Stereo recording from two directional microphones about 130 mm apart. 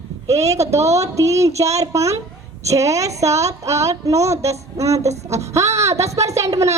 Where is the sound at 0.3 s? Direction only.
25° right (ahead or behind).